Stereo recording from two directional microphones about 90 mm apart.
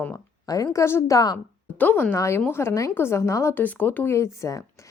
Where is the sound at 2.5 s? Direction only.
30° left (ahead or behind).